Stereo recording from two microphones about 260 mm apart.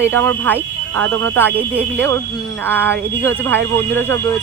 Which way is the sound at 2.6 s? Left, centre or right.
Centre.